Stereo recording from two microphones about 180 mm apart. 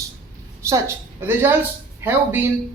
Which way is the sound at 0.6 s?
15° right (ahead or behind).